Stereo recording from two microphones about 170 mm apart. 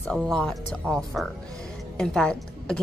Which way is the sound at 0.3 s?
Centre (ahead or behind).